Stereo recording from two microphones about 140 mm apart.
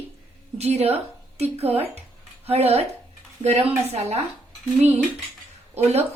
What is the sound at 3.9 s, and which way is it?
Speech, 50° right (ahead or behind).